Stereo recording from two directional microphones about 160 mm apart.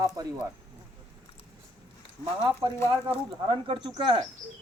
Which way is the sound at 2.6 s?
30° right (ahead or behind).